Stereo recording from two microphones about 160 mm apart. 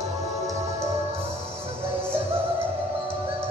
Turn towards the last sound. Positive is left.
turn(degrees=-35)  # may be behind; listen again after turning